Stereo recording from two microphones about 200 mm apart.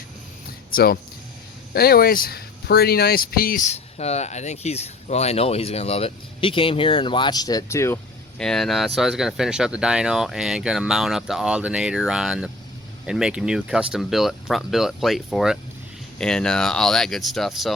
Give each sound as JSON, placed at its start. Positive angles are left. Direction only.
{"t": 0.7, "sound": "speech", "side_deg": 50}
{"t": 8.4, "sound": "speech", "side_deg": 0}